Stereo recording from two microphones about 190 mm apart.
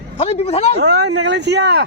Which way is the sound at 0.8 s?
65° right (ahead or behind).